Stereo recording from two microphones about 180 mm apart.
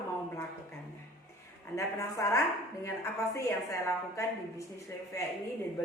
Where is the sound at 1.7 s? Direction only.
15° left (ahead or behind).